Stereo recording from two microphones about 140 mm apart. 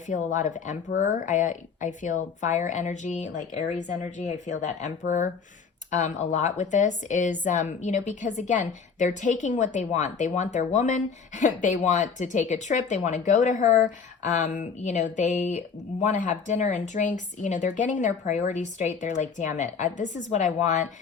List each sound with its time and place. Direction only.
0.1 s speech: 65° left (ahead or behind)